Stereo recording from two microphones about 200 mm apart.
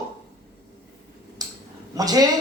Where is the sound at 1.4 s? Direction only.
20° right (ahead or behind).